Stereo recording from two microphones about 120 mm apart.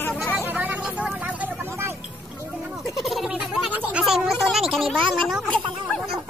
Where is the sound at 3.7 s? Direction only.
10° right (ahead or behind).